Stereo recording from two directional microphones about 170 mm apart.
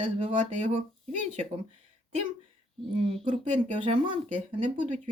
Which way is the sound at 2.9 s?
35° right (ahead or behind).